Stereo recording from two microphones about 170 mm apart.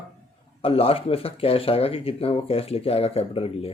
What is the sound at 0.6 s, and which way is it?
Speech, 35° left (ahead or behind).